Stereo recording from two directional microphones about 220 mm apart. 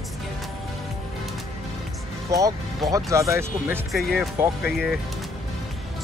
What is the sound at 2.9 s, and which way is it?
Speech, 15° right (ahead or behind).